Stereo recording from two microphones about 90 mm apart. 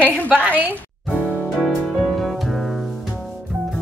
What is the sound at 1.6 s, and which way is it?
Music, 5° left (ahead or behind).